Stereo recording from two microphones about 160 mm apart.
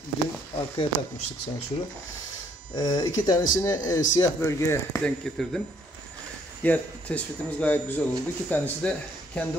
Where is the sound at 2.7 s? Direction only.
25° left (ahead or behind).